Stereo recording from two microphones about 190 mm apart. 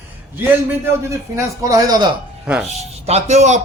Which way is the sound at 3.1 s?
35° right (ahead or behind).